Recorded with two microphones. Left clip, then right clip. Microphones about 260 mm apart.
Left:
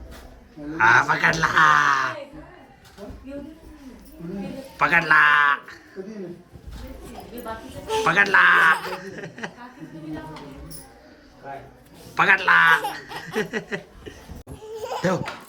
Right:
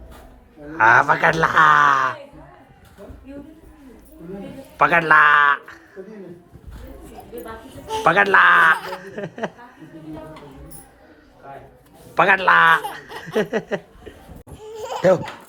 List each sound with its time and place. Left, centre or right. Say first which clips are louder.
0.7 s speech: right 3 dB; centre
4.8 s speech: right 3 dB; centre
7.9 s speech: right 3 dB; centre
12.1 s speech: right 2 dB; centre
14.7 s goat: right 1 dB; right
15.0 s speech: right 9 dB; centre